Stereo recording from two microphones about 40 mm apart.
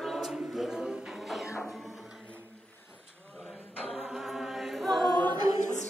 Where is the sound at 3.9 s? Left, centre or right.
Centre.